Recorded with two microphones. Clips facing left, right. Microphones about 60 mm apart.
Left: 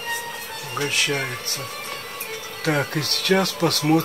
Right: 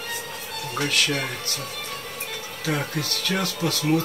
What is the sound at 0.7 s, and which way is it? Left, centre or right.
Speech, left.